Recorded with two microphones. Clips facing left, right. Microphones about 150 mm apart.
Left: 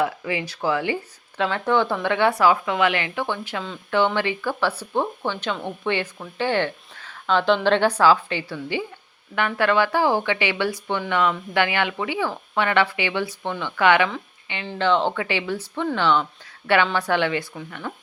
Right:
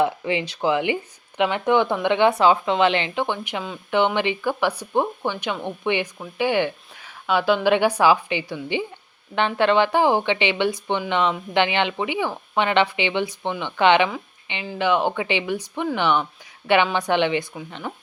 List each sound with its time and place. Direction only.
0.0 s a woman's voice: 25° right (ahead or behind)